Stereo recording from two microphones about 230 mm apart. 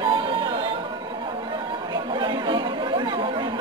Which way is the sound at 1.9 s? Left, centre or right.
Centre.